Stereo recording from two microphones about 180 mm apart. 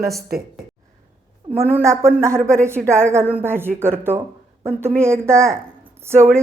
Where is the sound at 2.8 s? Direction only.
Centre (ahead or behind).